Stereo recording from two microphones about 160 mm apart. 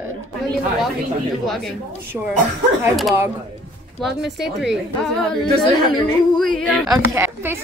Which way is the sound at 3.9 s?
Centre (ahead or behind).